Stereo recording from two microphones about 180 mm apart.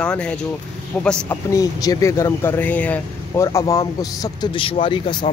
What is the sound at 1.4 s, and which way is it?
A man's voice, 20° left (ahead or behind).